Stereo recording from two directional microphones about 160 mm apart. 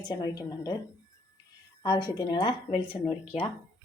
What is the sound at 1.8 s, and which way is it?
Speech, 25° left (ahead or behind).